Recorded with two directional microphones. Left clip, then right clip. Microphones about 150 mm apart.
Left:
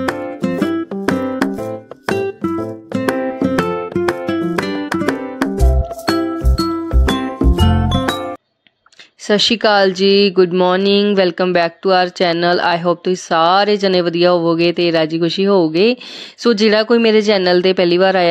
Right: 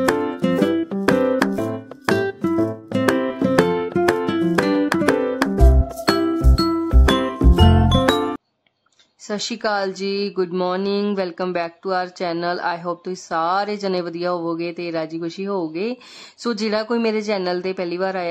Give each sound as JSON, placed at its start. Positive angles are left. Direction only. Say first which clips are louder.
{"t": 0.0, "sound": "music", "louder": "right 1 dB", "side_deg": 0}
{"t": 9.3, "sound": "speech", "louder": "left 10 dB", "side_deg": 30}